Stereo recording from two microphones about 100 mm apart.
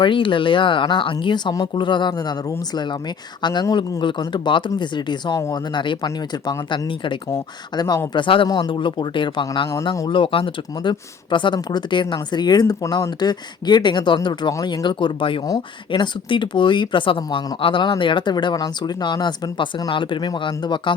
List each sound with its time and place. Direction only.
0.0 s speech: 55° left (ahead or behind)
3.4 s speech: 45° left (ahead or behind)
7.8 s speech: 45° left (ahead or behind)
13.1 s speech: 45° left (ahead or behind)
18.5 s speech: 40° left (ahead or behind)